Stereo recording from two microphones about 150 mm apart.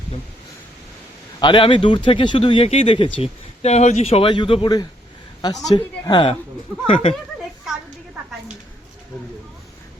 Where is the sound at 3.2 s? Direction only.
45° left (ahead or behind).